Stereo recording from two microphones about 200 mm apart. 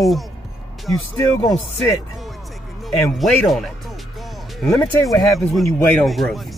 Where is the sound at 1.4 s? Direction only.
15° left (ahead or behind).